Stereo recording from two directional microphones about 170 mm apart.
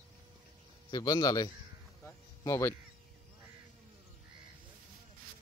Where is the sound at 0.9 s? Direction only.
20° left (ahead or behind).